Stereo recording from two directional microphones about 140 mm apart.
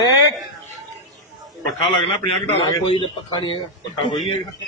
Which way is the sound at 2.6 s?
35° left (ahead or behind).